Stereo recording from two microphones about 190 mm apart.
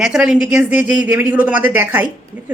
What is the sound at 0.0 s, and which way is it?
Speech, 5° right (ahead or behind).